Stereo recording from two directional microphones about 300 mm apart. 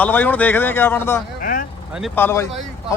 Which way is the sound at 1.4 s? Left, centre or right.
Left.